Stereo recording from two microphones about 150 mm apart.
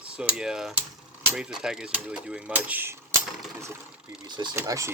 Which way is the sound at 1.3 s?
5° right (ahead or behind).